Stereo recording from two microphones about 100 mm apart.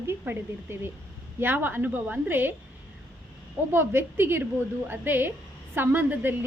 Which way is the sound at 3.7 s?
25° right (ahead or behind).